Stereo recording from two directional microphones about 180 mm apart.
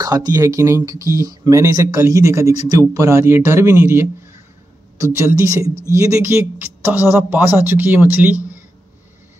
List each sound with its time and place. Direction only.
0.0 s speech: 20° right (ahead or behind)